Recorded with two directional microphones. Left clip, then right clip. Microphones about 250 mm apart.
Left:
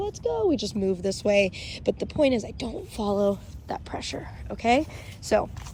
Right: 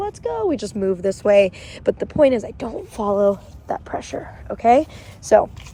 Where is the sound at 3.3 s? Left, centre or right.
Right.